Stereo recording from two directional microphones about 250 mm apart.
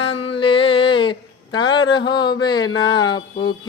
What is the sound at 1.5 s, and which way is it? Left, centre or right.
A man's voice, centre.